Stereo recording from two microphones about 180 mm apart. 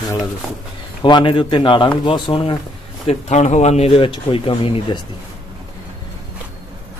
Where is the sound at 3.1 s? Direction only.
40° left (ahead or behind).